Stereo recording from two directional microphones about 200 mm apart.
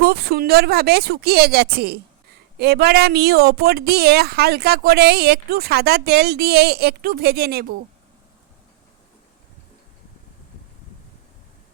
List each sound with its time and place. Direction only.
0.0 s speech: 50° right (ahead or behind)